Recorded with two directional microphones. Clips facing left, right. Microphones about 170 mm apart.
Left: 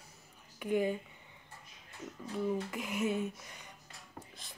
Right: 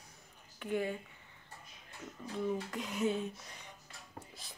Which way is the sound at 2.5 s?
5° left (ahead or behind).